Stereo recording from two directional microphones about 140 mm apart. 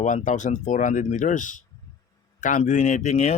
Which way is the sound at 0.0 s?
60° left (ahead or behind).